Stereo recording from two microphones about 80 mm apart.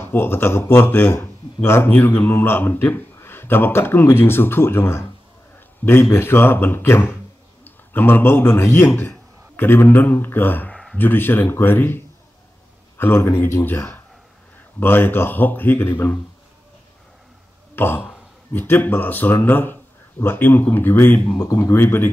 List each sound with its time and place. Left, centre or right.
0.0 s a man's voice: left
10.7 s a sound: centre
11.0 s speech: left
17.7 s a sound: left
18.5 s speech: left
21.4 s speech: left